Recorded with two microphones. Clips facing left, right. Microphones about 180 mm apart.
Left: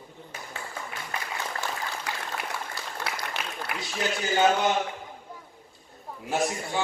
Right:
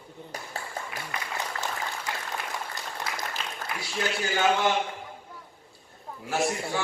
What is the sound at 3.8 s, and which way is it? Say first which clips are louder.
Speech: even; 20° left (ahead or behind).